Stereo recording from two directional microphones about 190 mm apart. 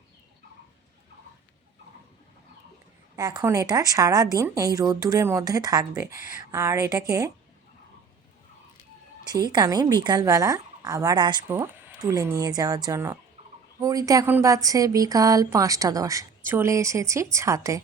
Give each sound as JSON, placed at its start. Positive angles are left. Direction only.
{"t": 3.2, "sound": "speech", "side_deg": -20}
{"t": 9.2, "sound": "speech", "side_deg": -20}
{"t": 11.4, "sound": "speech", "side_deg": -10}